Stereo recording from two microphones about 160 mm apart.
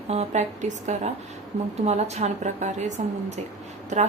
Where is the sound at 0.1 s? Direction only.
45° right (ahead or behind).